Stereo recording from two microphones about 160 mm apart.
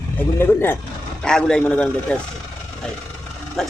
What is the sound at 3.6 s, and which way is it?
Speech, 5° left (ahead or behind).